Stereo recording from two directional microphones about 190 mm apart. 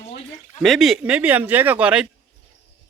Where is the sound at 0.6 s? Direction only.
Centre (ahead or behind).